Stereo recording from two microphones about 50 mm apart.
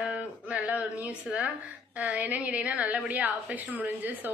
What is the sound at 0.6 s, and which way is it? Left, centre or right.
A woman's voice, right.